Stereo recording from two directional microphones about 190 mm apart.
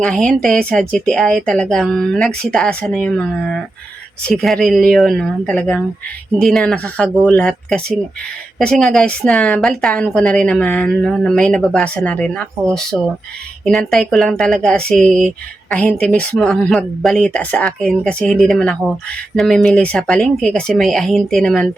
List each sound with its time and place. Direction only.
0.0 s a woman's voice: 5° left (ahead or behind)